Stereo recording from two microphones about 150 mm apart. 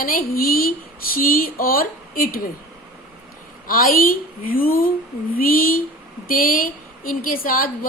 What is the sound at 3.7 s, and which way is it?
Speech, 70° left (ahead or behind).